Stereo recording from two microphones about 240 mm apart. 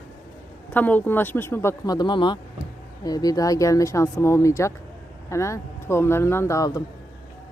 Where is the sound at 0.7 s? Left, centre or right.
Centre.